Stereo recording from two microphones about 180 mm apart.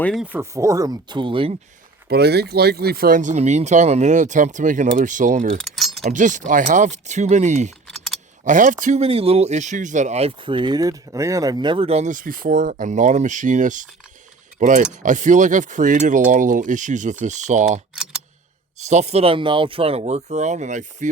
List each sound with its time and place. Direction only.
0.0 s speech: centre (ahead or behind)
0.3 s speech: 15° right (ahead or behind)
2.0 s speech: 65° right (ahead or behind); by 5.5 s 45° right (ahead or behind)
5.5 s keys jangling: centre (ahead or behind)
6.0 s speech: 45° right (ahead or behind)
7.9 s typing: centre (ahead or behind)
8.4 s speech: 45° right (ahead or behind)
17.9 s computer keyboard: 5° right (ahead or behind)
18.9 s speech: 40° right (ahead or behind)